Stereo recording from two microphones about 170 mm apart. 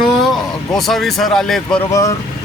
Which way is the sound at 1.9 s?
20° left (ahead or behind).